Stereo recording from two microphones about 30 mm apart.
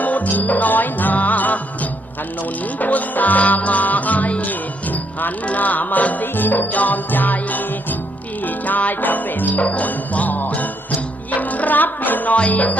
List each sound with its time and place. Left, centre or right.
0.0 s music: left
2.7 s music: left
5.5 s music: left
8.4 s music: left
9.6 s jingle bell: left
11.3 s music: left
12.5 s music: left